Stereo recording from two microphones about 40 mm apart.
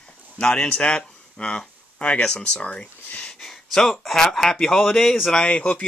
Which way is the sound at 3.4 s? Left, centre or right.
Centre.